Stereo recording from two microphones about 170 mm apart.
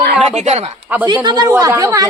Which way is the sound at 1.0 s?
25° right (ahead or behind).